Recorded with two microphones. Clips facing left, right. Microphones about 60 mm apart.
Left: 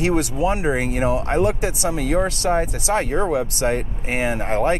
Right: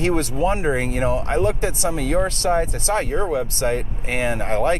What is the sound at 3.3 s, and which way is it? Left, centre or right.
Speech, left.